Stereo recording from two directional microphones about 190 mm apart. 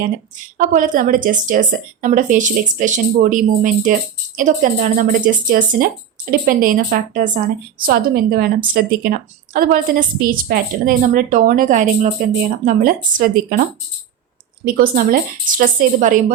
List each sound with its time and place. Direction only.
0.6 s a woman's voice: 45° right (ahead or behind)
14.6 s a woman's voice: 50° right (ahead or behind)